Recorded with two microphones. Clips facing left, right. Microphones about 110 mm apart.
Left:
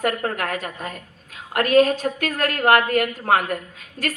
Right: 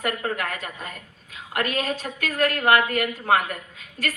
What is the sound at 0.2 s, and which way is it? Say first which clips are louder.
Speech: left 3 dB; 55° left (ahead or behind).